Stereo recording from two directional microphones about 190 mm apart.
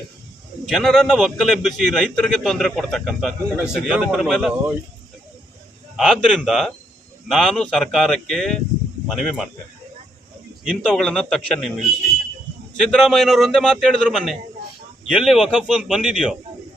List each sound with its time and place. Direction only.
0.7 s a man's voice: centre (ahead or behind)
6.0 s a man's voice: centre (ahead or behind)
10.6 s a man's voice: 5° left (ahead or behind)
12.8 s a man's voice: centre (ahead or behind)